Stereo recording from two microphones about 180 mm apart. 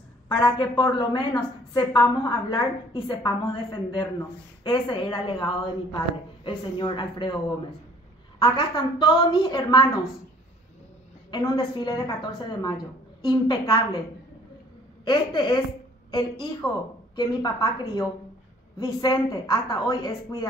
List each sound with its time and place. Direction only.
0.4 s a woman's voice: 25° left (ahead or behind)
11.2 s a woman's voice: 25° left (ahead or behind)
15.0 s a woman's voice: 25° left (ahead or behind)